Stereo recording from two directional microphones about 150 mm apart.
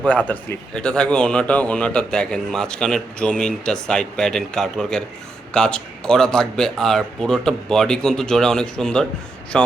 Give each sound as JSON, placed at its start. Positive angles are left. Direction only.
{"t": 0.3, "sound": "speech", "side_deg": 10}